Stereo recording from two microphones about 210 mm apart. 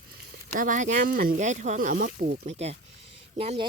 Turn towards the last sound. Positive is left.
turn(degrees=-25)  # may be behind; listen again after turning